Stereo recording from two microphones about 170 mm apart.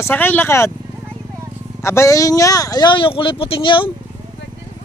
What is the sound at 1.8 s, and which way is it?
Speech, 15° left (ahead or behind).